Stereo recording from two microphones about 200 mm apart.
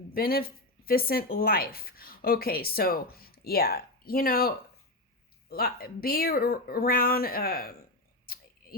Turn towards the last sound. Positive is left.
turn(degrees=50)  # may be behind; listen again after turning